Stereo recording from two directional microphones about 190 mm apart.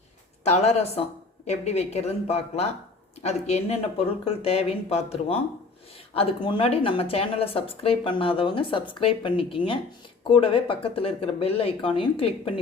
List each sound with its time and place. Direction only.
0.4 s speech: 35° left (ahead or behind)